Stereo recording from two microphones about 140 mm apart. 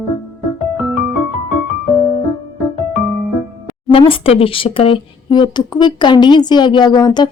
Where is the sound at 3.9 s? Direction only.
40° left (ahead or behind).